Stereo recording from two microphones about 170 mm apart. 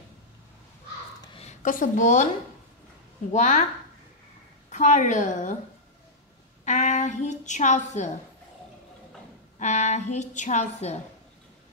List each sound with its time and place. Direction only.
1.2 s a sound: 30° left (ahead or behind)
1.5 s a woman's voice: 50° left (ahead or behind)
3.3 s a woman's voice: 45° left (ahead or behind)
4.6 s a woman's voice: 45° left (ahead or behind)
6.6 s a woman's voice: 45° left (ahead or behind)
9.6 s a woman's voice: 45° left (ahead or behind)